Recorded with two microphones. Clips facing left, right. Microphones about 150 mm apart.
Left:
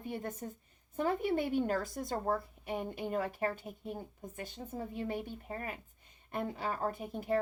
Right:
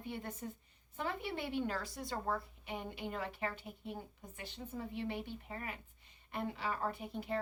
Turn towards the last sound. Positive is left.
turn(degrees=45)  # may be behind; listen again after turning